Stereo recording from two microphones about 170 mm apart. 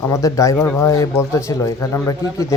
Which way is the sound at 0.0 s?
20° left (ahead or behind).